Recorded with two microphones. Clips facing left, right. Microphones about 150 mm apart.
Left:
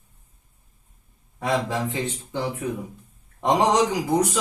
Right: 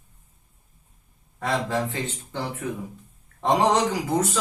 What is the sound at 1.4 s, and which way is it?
Speech, 15° left (ahead or behind).